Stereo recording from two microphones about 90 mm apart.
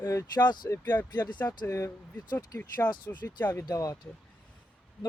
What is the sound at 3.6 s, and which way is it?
Speech, 40° left (ahead or behind).